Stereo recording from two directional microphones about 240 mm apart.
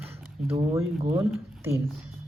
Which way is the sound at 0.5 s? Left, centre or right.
Centre.